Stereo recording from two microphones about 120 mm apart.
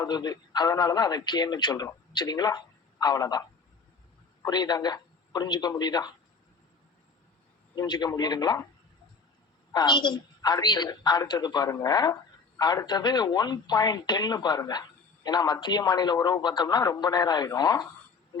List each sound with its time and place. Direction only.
0.0 s speech: 35° left (ahead or behind)
4.4 s speech: 35° left (ahead or behind)
7.8 s speech: 35° left (ahead or behind)
9.7 s speech: 40° left (ahead or behind)